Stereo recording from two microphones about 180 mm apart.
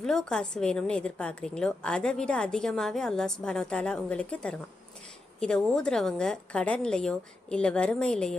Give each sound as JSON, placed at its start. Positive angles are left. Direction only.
{"t": 0.0, "sound": "a woman's voice", "side_deg": 5}